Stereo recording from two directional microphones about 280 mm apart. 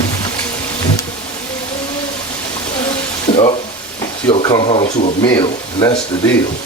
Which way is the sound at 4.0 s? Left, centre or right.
Centre.